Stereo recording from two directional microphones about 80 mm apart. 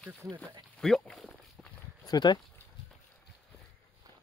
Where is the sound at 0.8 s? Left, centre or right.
Centre.